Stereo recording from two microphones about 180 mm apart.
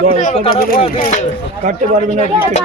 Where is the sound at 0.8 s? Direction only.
30° left (ahead or behind).